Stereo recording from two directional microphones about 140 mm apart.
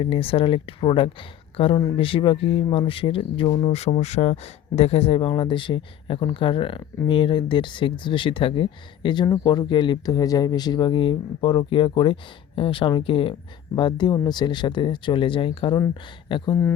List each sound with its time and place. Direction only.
0.0 s speech: 40° left (ahead or behind)